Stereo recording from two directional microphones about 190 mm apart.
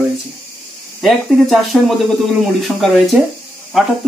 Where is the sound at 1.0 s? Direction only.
Centre (ahead or behind).